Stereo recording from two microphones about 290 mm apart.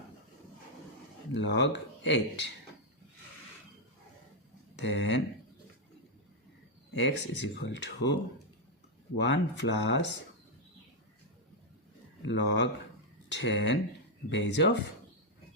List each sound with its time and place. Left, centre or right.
1.3 s speech: left
4.8 s speech: left
6.9 s speech: left
12.2 s speech: left